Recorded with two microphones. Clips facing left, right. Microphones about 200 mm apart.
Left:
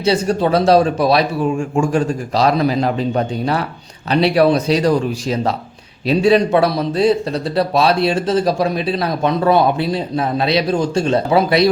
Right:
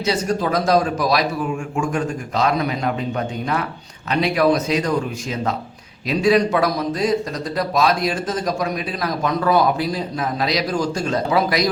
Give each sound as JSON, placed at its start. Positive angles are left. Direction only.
{"t": 0.0, "sound": "a man's voice", "side_deg": 30}